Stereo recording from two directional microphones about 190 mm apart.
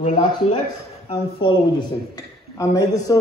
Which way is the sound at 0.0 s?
30° left (ahead or behind).